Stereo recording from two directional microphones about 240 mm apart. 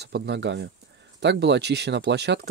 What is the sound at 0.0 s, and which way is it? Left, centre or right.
Speech, right.